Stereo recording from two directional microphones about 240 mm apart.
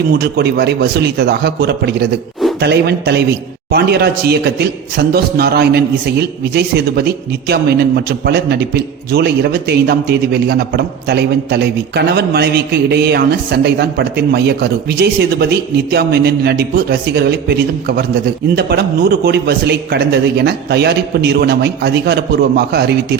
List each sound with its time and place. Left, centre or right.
0.1 s a man's voice: right